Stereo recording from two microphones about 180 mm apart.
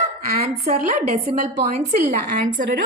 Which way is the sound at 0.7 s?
45° right (ahead or behind).